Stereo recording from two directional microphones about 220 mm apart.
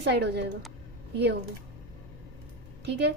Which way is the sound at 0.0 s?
50° right (ahead or behind).